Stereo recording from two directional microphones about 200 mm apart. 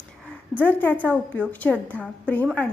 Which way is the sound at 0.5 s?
10° left (ahead or behind).